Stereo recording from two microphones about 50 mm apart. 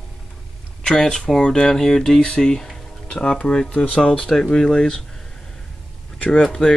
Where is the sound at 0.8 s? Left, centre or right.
Centre.